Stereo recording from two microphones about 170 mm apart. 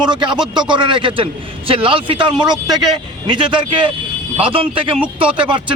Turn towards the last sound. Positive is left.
turn(degrees=-30)  # may be behind; listen again after turning